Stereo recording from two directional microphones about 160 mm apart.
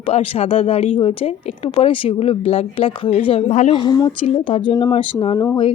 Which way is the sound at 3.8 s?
25° left (ahead or behind).